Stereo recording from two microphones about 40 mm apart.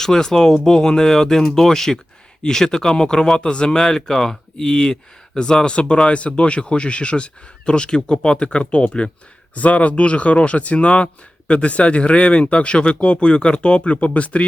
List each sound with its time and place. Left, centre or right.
0.0 s speech: centre; by 14.4 s left